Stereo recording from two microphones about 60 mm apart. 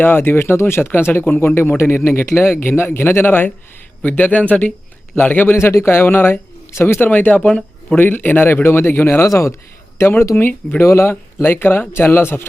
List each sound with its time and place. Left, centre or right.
0.0 s a man's voice: left
5.5 s speech: left
7.4 s speech: centre
7.9 s speech: left
9.2 s a man's voice: left
10.0 s speech: left
10.3 s speech: left
10.8 s speech: left
11.4 s speech: left